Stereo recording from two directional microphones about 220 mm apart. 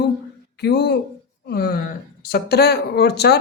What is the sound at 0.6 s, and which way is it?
Speech, 50° left (ahead or behind).